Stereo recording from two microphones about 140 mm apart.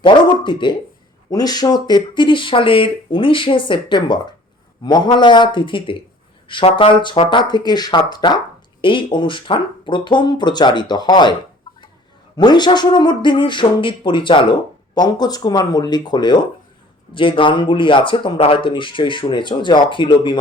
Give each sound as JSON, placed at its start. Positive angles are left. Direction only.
{"t": 0.0, "sound": "a sound", "side_deg": 35}
{"t": 1.3, "sound": "speech", "side_deg": 30}
{"t": 12.4, "sound": "speech", "side_deg": 30}